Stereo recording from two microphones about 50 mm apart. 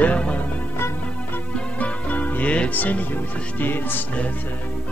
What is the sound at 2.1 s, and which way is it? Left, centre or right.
Music, left.